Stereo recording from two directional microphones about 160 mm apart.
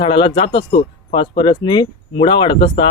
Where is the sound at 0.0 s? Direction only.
30° left (ahead or behind).